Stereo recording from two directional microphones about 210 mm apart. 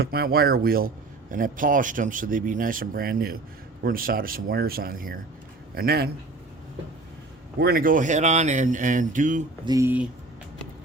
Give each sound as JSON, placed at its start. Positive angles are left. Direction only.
{"t": 0.0, "sound": "speech", "side_deg": -45}
{"t": 7.6, "sound": "speech", "side_deg": -45}
{"t": 9.6, "sound": "speech", "side_deg": -15}